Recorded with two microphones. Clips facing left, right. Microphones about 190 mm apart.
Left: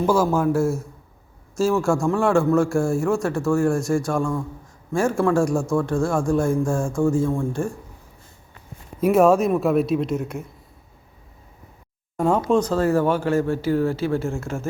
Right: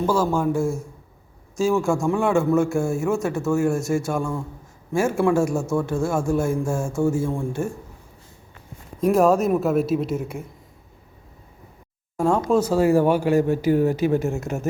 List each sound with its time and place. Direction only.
0.0 s a man's voice: 10° left (ahead or behind); by 7.7 s 10° right (ahead or behind)
9.0 s a man's voice: 5° left (ahead or behind)
12.5 s speech: 5° right (ahead or behind)